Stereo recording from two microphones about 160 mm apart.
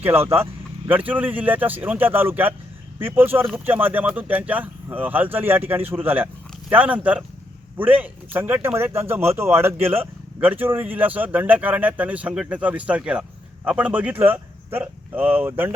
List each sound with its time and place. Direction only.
0.0 s speech: 15° right (ahead or behind)